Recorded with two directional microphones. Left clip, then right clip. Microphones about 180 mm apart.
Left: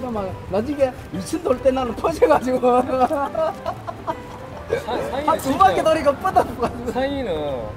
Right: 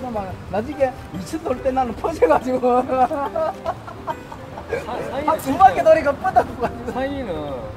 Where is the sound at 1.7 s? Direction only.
55° left (ahead or behind).